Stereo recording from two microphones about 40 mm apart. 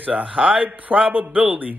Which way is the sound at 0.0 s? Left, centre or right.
Right.